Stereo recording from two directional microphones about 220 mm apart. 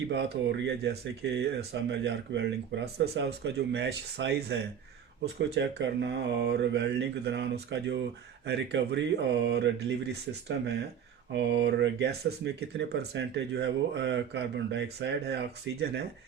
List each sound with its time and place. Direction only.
0.1 s speech: 55° right (ahead or behind)